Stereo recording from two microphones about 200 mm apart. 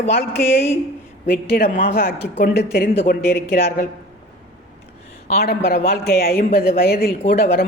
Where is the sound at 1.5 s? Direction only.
50° left (ahead or behind).